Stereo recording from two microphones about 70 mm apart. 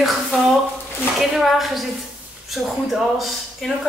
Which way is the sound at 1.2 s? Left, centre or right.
Centre.